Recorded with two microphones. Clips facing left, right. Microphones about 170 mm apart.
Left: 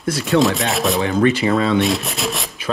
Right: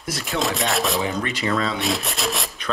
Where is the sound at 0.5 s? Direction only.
Centre (ahead or behind).